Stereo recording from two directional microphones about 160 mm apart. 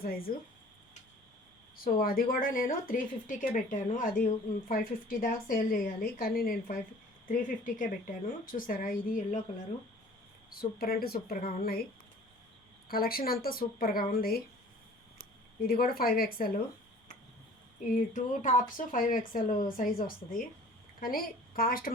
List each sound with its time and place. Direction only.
0.0 s a woman's voice: 65° left (ahead or behind)
1.7 s a woman's voice: 65° left (ahead or behind)
7.3 s a woman's voice: 55° left (ahead or behind)
10.5 s speech: 70° left (ahead or behind)
12.9 s speech: 70° left (ahead or behind)
15.6 s speech: 70° left (ahead or behind)
17.9 s a woman's voice: 55° left (ahead or behind)